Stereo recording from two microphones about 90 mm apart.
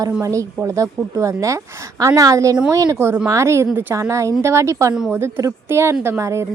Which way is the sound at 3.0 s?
25° right (ahead or behind).